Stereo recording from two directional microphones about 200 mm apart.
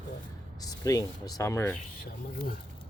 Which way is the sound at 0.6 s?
15° left (ahead or behind).